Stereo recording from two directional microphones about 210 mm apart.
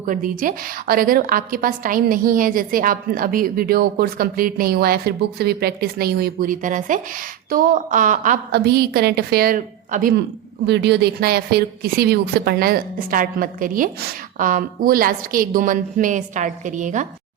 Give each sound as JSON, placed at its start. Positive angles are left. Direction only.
{"t": 0.0, "sound": "a woman's voice", "side_deg": -40}
{"t": 10.7, "sound": "a woman's voice", "side_deg": -55}